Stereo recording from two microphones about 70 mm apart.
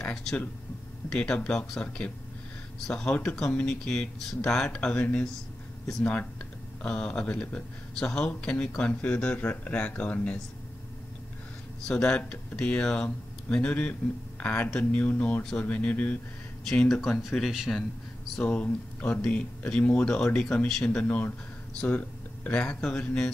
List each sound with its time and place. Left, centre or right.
0.0 s a sound: centre
1.1 s speech: centre
6.8 s speech: centre
11.9 s speech: centre
16.8 s speech: centre
18.4 s speech: centre